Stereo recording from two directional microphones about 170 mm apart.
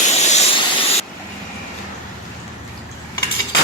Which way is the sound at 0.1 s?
40° left (ahead or behind).